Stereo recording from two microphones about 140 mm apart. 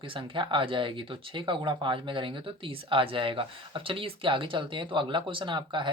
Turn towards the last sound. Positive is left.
turn(degrees=-35)  # may be behind; listen again after turning